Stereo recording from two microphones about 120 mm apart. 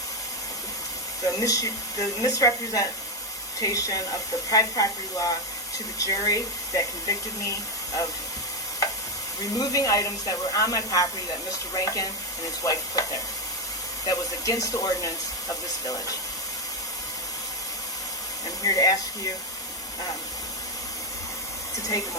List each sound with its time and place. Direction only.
1.3 s speech: 30° left (ahead or behind)
9.4 s speech: 30° left (ahead or behind)
14.1 s speech: 30° left (ahead or behind)
18.6 s speech: 30° left (ahead or behind)